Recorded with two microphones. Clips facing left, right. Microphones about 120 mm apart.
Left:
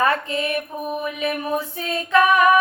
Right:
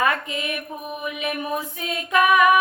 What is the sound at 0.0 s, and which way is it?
Mantra, 30° left (ahead or behind).